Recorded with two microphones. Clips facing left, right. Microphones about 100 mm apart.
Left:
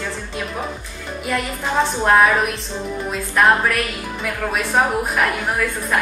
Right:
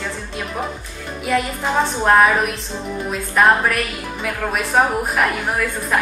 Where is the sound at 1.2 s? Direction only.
Centre (ahead or behind).